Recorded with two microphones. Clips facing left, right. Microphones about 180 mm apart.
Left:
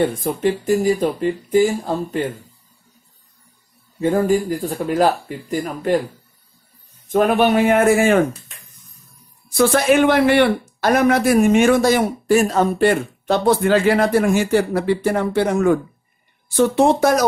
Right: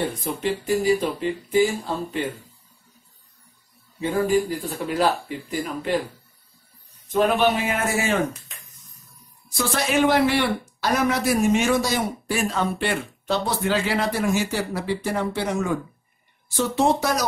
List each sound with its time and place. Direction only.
0.2 s speech: 45° left (ahead or behind)
4.0 s speech: 45° left (ahead or behind)
7.1 s speech: 55° left (ahead or behind)
9.6 s speech: 55° left (ahead or behind)